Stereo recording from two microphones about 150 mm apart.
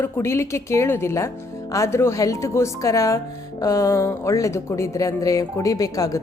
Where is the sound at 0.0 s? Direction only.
20° left (ahead or behind).